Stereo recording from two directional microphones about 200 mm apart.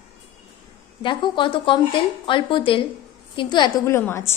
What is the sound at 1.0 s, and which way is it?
A woman's voice, 25° left (ahead or behind).